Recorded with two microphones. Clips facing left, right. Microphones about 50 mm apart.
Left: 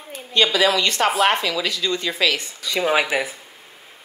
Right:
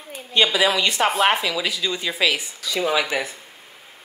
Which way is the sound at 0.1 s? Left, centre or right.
Centre.